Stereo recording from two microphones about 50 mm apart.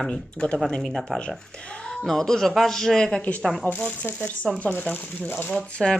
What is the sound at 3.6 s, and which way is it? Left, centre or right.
Speech, left.